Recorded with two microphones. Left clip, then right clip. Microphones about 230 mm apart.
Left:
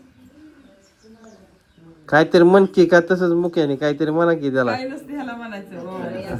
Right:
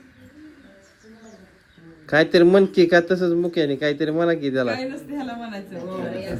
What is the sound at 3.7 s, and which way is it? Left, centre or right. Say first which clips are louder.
Speech: left 2 dB; left.